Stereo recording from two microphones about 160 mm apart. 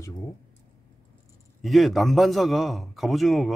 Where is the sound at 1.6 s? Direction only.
Centre (ahead or behind).